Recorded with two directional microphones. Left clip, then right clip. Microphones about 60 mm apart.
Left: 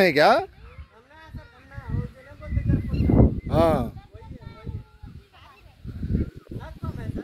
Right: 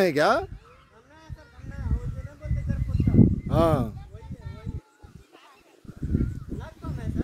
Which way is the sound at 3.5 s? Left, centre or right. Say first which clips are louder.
Left 4 dB; right.